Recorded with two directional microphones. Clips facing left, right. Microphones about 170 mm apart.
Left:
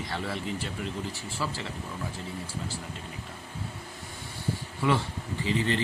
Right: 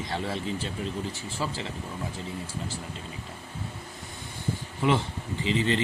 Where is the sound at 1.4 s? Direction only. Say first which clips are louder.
Right 1 dB; 25° right (ahead or behind).